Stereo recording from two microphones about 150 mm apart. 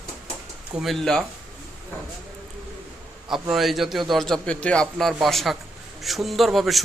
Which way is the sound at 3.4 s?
Centre (ahead or behind).